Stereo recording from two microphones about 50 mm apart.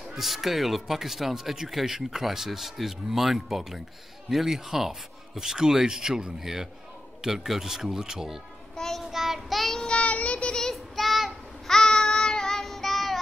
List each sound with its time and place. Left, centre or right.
0.1 s speech: centre
8.7 s child singing: centre
9.1 s child singing: centre
9.8 s child singing: centre
10.7 s child singing: centre